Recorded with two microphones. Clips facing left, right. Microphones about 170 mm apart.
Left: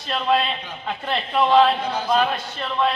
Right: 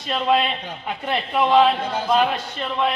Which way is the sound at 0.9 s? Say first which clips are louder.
Right 1 dB; 15° right (ahead or behind).